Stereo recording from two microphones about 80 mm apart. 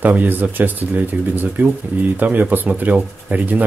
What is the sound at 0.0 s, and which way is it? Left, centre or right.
Speech, right.